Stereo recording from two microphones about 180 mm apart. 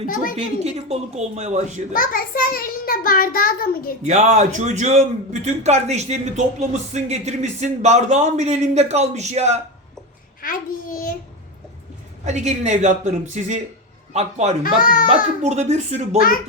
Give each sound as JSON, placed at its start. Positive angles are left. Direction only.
{"t": 0.3, "sound": "a man's voice", "side_deg": -35}
{"t": 1.9, "sound": "a child's voice", "side_deg": 50}
{"t": 4.0, "sound": "a man's voice", "side_deg": -40}
{"t": 10.4, "sound": "a child's voice", "side_deg": 50}
{"t": 12.2, "sound": "a man's voice", "side_deg": -40}
{"t": 14.6, "sound": "a child's voice", "side_deg": 50}
{"t": 15.4, "sound": "a man's voice", "side_deg": -40}